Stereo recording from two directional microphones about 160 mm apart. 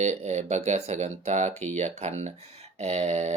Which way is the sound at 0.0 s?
45° right (ahead or behind).